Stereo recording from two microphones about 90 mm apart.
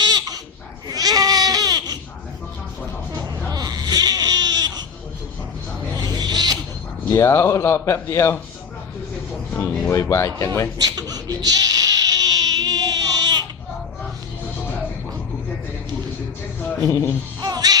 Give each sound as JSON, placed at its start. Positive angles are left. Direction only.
{"t": 0.0, "sound": "a sound", "side_deg": -50}
{"t": 0.9, "sound": "goat", "side_deg": -45}
{"t": 3.1, "sound": "snoring", "side_deg": -45}
{"t": 6.0, "sound": "owl", "side_deg": -50}
{"t": 7.1, "sound": "speech", "side_deg": 30}
{"t": 9.6, "sound": "speech", "side_deg": 30}
{"t": 10.8, "sound": "baby cry", "side_deg": -45}
{"t": 17.4, "sound": "music", "side_deg": -50}